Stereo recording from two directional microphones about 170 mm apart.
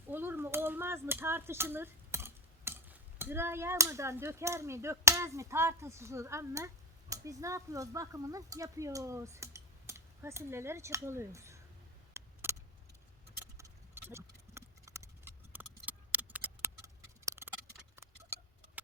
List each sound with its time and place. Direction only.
0.1 s speech: 10° right (ahead or behind)
12.1 s a sound: 15° right (ahead or behind)
13.4 s clip-clop: 15° right (ahead or behind)
17.9 s tick-tock: 15° right (ahead or behind)